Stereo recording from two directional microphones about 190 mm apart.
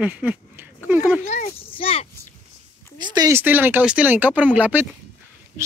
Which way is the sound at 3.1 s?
15° right (ahead or behind).